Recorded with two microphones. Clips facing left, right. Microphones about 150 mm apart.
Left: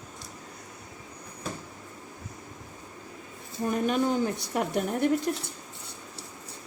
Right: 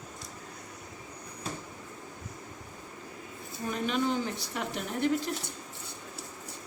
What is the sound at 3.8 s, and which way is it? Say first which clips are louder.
A woman's voice: left 3 dB; 50° left (ahead or behind).